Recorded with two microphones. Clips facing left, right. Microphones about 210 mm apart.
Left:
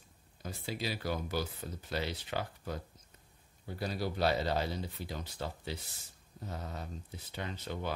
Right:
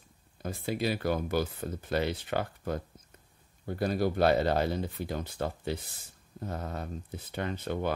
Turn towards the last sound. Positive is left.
turn(degrees=-55)  # may be behind; listen again after turning